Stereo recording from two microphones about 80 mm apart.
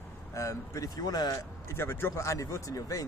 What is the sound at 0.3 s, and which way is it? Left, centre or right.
Speech, left.